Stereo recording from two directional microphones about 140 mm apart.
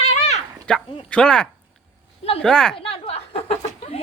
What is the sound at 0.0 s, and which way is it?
Dog, 55° left (ahead or behind).